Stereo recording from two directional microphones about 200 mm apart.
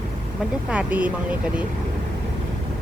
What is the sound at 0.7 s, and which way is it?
Speech, 5° right (ahead or behind).